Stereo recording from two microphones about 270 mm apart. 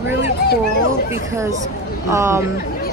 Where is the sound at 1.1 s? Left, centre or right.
Centre.